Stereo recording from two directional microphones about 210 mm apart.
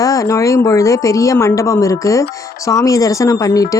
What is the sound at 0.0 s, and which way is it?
Speech, 15° left (ahead or behind).